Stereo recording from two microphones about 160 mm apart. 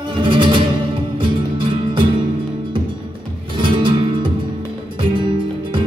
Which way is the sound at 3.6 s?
30° right (ahead or behind).